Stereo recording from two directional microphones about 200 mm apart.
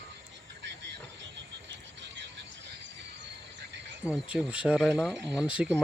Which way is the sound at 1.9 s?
60° right (ahead or behind).